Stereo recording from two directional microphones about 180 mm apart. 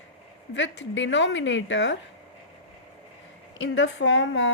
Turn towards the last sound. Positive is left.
turn(degrees=85)